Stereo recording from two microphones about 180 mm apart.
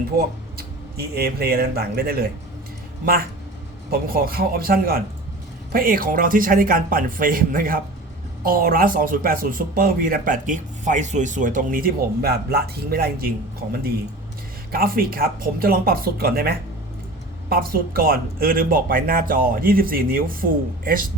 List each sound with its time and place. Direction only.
0.5 s speech: 60° right (ahead or behind)
3.9 s speech: 55° right (ahead or behind)